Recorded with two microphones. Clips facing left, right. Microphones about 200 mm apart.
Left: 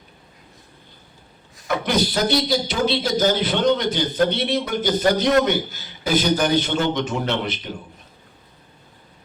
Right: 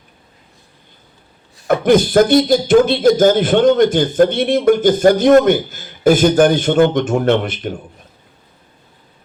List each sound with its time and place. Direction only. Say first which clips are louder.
1.6 s a man's voice: right 9 dB; 50° right (ahead or behind)